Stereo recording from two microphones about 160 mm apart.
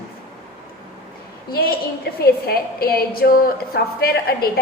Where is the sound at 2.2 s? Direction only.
70° left (ahead or behind).